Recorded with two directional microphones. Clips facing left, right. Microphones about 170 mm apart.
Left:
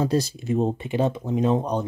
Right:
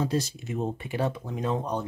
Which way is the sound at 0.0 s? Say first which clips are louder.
Left 5 dB; 35° left (ahead or behind).